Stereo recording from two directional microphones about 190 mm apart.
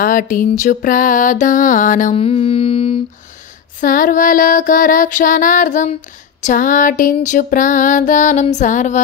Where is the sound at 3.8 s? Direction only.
45° left (ahead or behind).